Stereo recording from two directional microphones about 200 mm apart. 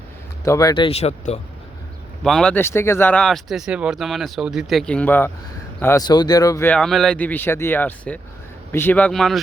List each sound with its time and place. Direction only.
0.4 s speech: 15° left (ahead or behind); by 1.4 s 30° left (ahead or behind)
2.2 s speech: centre (ahead or behind)